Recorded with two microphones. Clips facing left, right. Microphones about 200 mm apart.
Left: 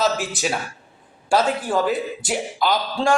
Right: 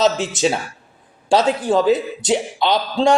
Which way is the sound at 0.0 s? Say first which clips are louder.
Right 5 dB; 20° right (ahead or behind).